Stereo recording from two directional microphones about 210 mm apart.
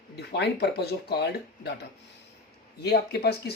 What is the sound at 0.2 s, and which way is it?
Speech, 50° left (ahead or behind).